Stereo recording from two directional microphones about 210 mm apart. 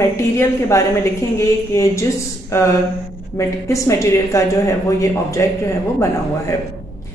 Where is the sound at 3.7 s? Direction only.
15° left (ahead or behind).